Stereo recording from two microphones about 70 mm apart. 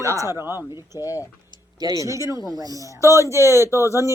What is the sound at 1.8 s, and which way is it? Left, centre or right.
Speech, right.